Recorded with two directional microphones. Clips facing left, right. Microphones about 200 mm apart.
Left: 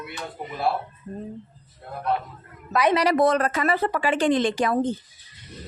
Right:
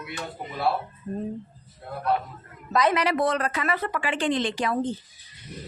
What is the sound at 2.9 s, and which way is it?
Speech, 40° left (ahead or behind).